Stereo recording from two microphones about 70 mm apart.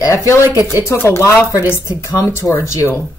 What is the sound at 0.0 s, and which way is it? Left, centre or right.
Speech, left.